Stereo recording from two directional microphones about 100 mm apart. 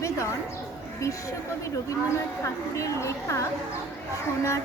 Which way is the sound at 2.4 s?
30° left (ahead or behind).